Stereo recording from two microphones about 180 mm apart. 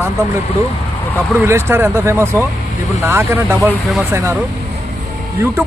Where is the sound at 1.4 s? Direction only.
15° right (ahead or behind).